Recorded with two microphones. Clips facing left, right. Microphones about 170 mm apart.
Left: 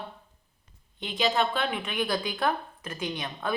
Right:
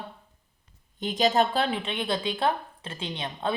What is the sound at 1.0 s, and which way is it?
Speech, 45° right (ahead or behind).